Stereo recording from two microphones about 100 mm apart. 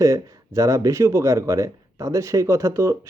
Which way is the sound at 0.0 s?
35° right (ahead or behind).